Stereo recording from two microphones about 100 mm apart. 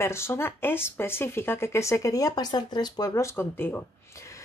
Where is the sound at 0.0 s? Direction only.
25° left (ahead or behind).